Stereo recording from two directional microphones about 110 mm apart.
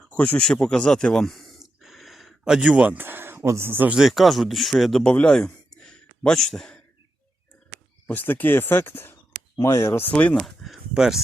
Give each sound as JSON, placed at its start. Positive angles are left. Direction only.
{"t": 0.1, "sound": "speech", "side_deg": 10}
{"t": 3.9, "sound": "a man's voice", "side_deg": 0}
{"t": 5.9, "sound": "a sound", "side_deg": 5}
{"t": 8.0, "sound": "speech", "side_deg": 15}
{"t": 10.1, "sound": "speech", "side_deg": 10}
{"t": 10.4, "sound": "speech", "side_deg": 0}